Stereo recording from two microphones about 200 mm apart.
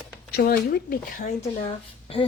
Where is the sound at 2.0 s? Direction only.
30° left (ahead or behind).